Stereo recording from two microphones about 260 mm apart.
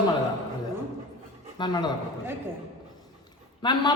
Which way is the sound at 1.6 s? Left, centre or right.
Centre.